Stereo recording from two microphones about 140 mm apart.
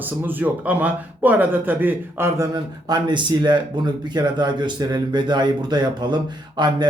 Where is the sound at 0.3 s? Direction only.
15° right (ahead or behind).